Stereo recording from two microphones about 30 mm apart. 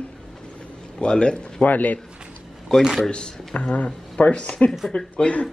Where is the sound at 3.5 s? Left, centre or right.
Left.